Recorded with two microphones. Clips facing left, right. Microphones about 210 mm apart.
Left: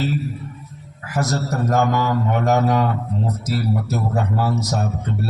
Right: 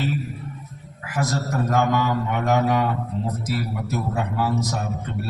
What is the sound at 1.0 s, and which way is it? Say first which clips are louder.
A man's voice: left 3 dB; 40° left (ahead or behind).